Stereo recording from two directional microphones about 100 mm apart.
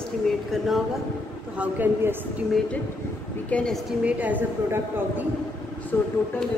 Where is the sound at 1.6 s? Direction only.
20° right (ahead or behind).